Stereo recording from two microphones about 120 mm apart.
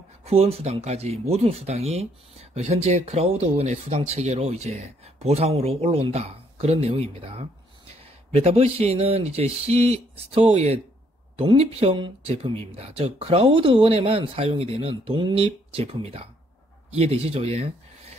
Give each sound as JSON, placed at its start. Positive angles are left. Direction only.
{"t": 0.2, "sound": "speech", "side_deg": -55}